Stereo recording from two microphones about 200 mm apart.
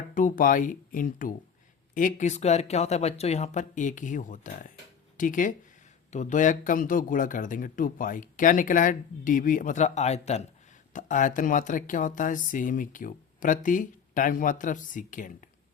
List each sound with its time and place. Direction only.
0.1 s speech: 40° left (ahead or behind)